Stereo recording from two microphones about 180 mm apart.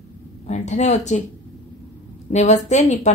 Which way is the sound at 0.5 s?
40° left (ahead or behind).